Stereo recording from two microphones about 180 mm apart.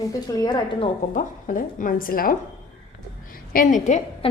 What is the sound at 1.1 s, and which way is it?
A woman's voice, 45° left (ahead or behind).